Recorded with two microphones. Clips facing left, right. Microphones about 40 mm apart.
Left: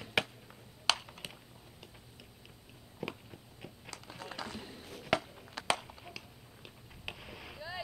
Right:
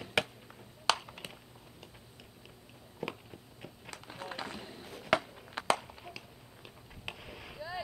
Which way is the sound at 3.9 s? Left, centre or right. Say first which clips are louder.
Right 3 dB; right.